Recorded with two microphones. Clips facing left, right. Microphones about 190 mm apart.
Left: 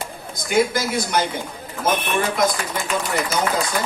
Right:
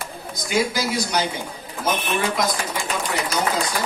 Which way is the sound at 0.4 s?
55° left (ahead or behind).